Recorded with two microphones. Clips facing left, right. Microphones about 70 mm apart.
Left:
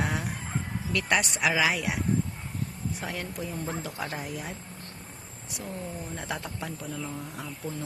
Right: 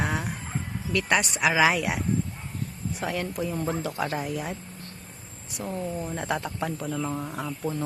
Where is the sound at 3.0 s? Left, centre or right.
Right.